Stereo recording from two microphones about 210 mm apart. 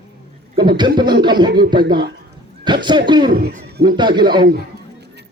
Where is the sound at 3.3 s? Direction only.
50° right (ahead or behind).